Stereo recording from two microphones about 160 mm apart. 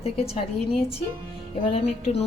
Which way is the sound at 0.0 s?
40° left (ahead or behind).